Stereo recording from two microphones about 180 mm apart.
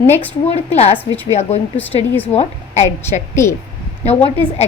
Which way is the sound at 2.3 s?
40° left (ahead or behind).